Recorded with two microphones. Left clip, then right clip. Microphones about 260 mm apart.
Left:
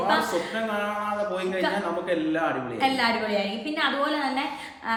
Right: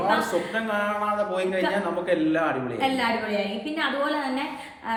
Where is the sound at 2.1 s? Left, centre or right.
Centre.